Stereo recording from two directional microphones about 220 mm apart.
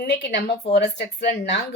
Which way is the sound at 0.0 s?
50° left (ahead or behind).